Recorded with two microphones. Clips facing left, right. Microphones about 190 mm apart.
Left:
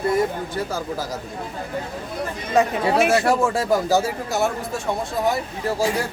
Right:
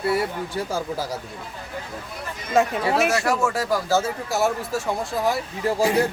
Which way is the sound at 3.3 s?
30° left (ahead or behind).